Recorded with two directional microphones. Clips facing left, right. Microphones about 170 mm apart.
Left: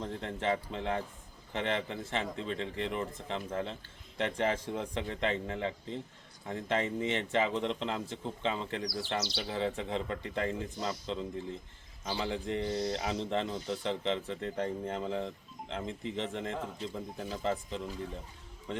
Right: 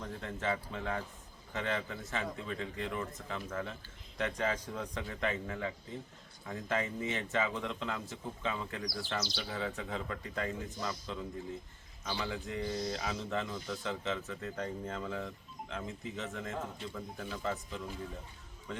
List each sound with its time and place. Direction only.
0.0 s a man's voice: 25° left (ahead or behind)